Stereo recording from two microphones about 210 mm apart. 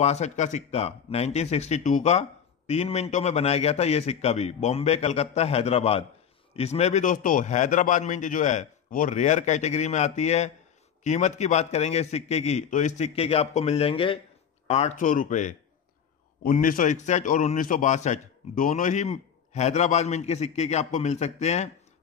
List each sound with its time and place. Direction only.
0.0 s speech: 30° left (ahead or behind)